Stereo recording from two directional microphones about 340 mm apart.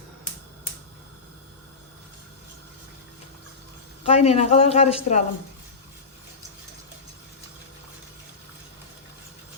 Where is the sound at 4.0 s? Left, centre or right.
Centre.